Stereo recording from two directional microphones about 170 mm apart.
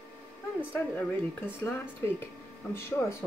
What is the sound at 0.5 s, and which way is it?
Speech, 10° left (ahead or behind).